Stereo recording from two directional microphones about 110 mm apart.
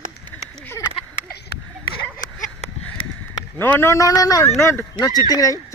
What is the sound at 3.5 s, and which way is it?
A man's voice, 20° left (ahead or behind).